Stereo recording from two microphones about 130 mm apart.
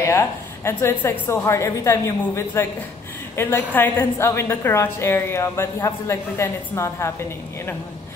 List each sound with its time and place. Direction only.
0.0 s a woman's voice: 20° left (ahead or behind)